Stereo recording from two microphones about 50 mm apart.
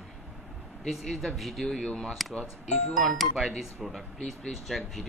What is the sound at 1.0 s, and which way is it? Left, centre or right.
Speech, centre.